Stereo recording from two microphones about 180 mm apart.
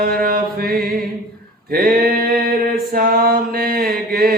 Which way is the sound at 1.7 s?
55° right (ahead or behind).